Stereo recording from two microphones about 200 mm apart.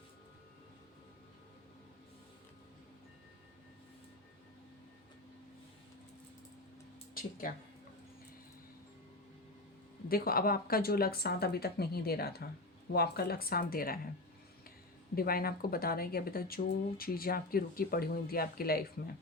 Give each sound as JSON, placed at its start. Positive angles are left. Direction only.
{"t": 7.1, "sound": "speech", "side_deg": 45}
{"t": 10.1, "sound": "speech", "side_deg": 50}
{"t": 15.1, "sound": "speech", "side_deg": 50}